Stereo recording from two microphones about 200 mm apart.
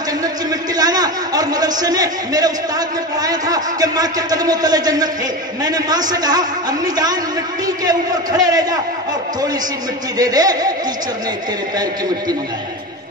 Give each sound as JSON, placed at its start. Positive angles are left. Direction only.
{"t": 0.2, "sound": "a sound", "side_deg": -20}
{"t": 3.2, "sound": "a man's voice", "side_deg": -20}
{"t": 10.1, "sound": "a man's voice", "side_deg": -20}